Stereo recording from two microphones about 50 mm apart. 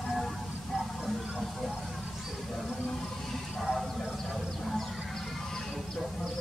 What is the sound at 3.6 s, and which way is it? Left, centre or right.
Clip-clop, centre.